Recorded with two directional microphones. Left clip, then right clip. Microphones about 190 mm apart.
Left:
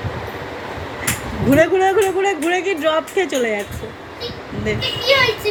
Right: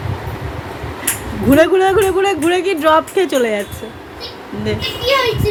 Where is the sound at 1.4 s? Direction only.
15° right (ahead or behind).